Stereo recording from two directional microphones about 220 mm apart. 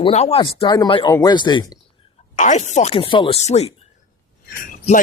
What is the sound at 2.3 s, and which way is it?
Speech, 35° left (ahead or behind).